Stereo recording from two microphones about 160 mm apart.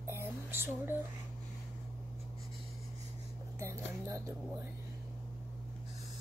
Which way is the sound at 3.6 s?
20° right (ahead or behind).